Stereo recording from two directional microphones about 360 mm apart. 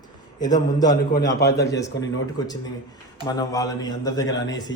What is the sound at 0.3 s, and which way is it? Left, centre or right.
Speech, centre.